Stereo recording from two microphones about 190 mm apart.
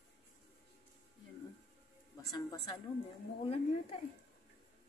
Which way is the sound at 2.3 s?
20° left (ahead or behind).